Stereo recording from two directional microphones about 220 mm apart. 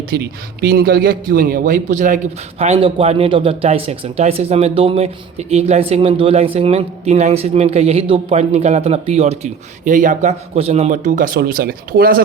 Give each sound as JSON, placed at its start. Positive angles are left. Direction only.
{"t": 0.1, "sound": "a man's voice", "side_deg": -45}